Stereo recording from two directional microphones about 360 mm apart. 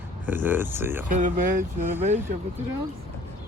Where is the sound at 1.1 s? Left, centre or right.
Right.